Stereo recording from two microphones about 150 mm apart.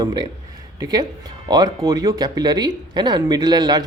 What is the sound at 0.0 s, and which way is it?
Speech, 30° right (ahead or behind).